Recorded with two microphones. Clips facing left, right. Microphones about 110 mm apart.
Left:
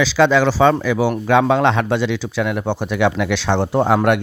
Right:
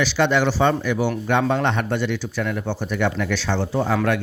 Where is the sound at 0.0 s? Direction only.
90° left.